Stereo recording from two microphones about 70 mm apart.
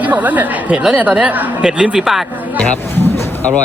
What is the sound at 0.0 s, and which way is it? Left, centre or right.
Speech, right.